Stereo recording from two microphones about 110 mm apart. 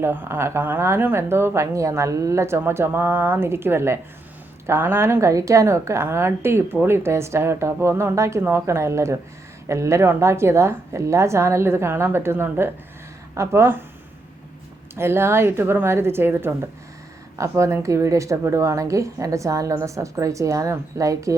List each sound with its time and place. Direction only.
0.0 s a woman's voice: 20° right (ahead or behind)
14.9 s a woman's voice: 20° right (ahead or behind)